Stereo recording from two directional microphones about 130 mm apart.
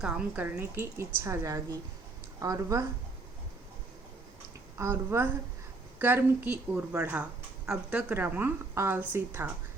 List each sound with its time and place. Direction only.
0.0 s a woman's voice: 10° right (ahead or behind); by 2.8 s 25° right (ahead or behind)
4.8 s a woman's voice: 20° right (ahead or behind)